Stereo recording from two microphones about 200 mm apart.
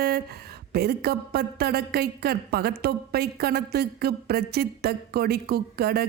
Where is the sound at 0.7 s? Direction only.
50° right (ahead or behind).